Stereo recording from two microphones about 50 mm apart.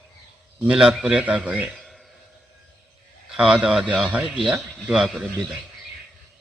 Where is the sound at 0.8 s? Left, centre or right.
Centre.